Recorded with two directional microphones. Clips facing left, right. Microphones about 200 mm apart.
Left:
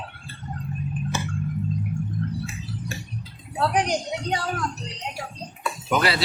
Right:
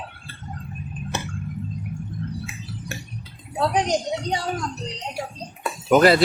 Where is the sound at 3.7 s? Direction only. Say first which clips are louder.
Right 2 dB; 25° right (ahead or behind).